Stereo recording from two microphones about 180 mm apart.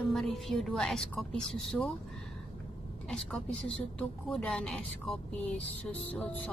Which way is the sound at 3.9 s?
5° left (ahead or behind).